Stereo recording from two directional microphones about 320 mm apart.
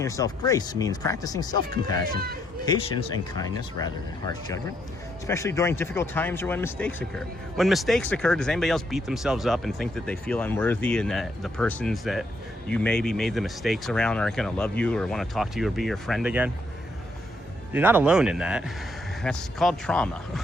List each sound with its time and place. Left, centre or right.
0.0 s speech: centre
2.1 s speech: right
2.6 s speech: centre
17.7 s speech: centre